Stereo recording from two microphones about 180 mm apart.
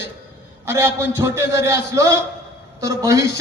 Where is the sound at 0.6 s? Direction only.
15° right (ahead or behind).